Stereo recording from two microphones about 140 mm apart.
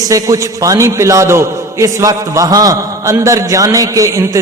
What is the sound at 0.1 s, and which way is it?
A man's voice, 25° right (ahead or behind).